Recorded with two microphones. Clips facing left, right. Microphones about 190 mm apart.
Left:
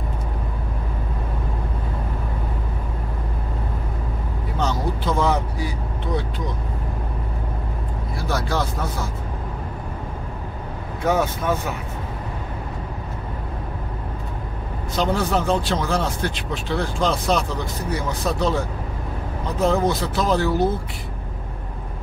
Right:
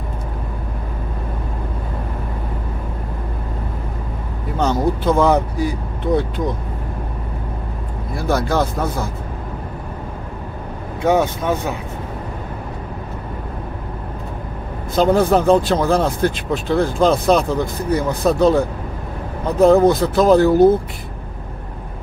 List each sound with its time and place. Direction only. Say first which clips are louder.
4.6 s vehicle: right 7 dB; 55° right (ahead or behind)
8.2 s speech: right 6 dB; 50° right (ahead or behind)
11.1 s speech: right 4 dB; 20° right (ahead or behind)
15.0 s speech: right 7 dB; 50° right (ahead or behind)
19.6 s speech: right 9 dB; 55° right (ahead or behind)